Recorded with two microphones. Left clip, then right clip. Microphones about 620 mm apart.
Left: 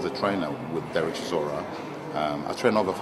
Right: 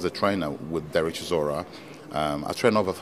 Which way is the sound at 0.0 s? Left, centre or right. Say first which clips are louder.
Right 1 dB; right.